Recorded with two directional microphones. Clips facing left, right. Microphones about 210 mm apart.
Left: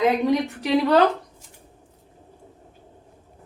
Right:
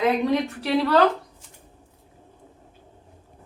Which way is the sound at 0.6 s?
20° left (ahead or behind).